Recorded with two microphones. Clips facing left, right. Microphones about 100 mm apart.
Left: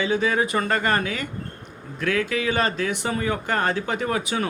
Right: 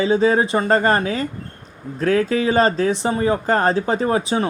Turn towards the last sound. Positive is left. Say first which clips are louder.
# right 6 dB
turn(degrees=-30)  # may be behind; listen again after turning